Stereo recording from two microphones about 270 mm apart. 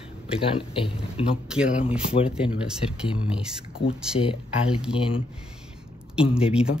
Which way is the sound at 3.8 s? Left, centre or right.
Centre.